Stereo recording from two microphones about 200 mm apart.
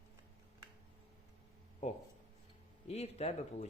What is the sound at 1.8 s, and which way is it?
Speech, 35° left (ahead or behind).